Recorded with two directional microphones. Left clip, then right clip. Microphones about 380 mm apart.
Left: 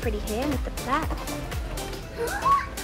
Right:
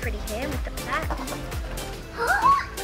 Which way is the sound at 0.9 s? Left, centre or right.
Centre.